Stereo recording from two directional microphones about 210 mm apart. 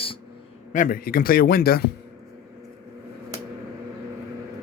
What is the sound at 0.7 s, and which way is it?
A man's voice, 40° left (ahead or behind).